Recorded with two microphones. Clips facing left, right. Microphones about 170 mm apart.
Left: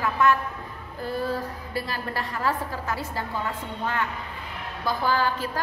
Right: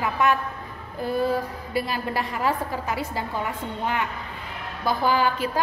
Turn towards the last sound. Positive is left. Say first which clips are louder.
# right 2 dB
turn(degrees=-15)  # may be behind; listen again after turning